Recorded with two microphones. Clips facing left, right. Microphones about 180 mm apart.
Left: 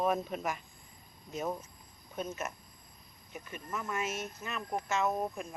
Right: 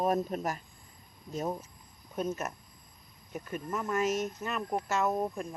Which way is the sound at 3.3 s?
40° right (ahead or behind).